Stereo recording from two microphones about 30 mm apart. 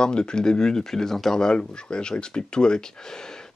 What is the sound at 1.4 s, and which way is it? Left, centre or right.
Speech, left.